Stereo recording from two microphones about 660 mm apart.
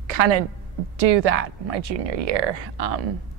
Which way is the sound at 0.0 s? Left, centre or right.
Right.